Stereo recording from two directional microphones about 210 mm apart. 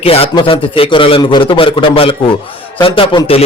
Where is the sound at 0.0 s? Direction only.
25° left (ahead or behind).